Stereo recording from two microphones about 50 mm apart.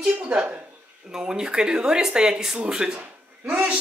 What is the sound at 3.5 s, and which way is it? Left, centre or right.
Speech, right.